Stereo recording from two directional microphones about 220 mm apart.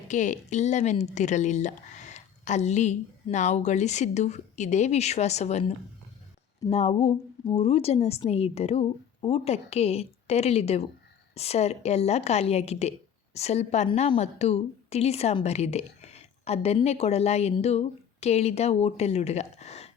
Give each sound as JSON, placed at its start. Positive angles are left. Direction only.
{"t": 0.1, "sound": "a woman's voice", "side_deg": 35}